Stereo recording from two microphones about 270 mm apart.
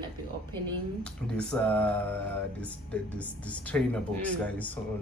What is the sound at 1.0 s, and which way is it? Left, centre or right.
Speech, centre.